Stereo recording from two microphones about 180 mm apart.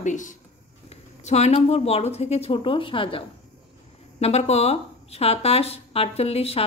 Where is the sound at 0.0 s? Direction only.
45° left (ahead or behind).